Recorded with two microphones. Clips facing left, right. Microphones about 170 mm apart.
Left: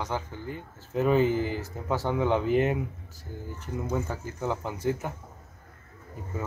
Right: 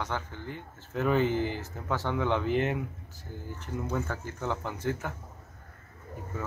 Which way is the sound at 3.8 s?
15° left (ahead or behind).